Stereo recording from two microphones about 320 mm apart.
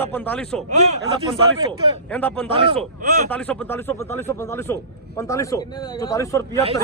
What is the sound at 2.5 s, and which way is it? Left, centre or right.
Speech, centre.